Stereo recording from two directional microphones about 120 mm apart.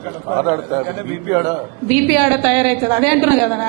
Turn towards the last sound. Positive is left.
turn(degrees=-20)  # may be behind; listen again after turning